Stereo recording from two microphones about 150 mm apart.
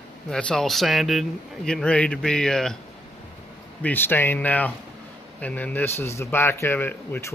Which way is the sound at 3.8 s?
15° left (ahead or behind).